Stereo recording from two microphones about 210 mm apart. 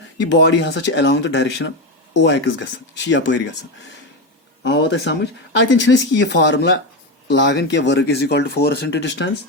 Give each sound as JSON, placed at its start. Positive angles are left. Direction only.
{"t": 0.2, "sound": "speech", "side_deg": 55}
{"t": 4.6, "sound": "speech", "side_deg": 55}